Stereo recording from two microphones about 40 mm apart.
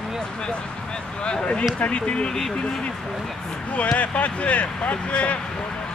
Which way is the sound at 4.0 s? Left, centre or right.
Left.